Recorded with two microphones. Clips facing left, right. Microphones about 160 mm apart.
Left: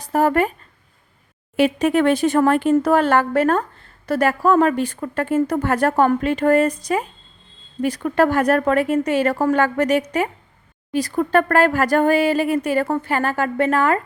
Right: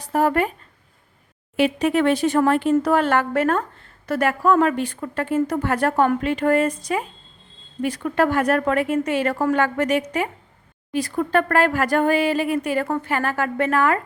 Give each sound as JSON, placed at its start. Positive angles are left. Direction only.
{"t": 0.0, "sound": "speech", "side_deg": 40}
{"t": 1.5, "sound": "speech", "side_deg": 45}